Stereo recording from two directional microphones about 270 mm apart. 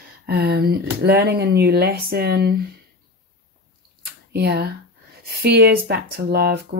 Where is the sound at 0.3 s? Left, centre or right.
Right.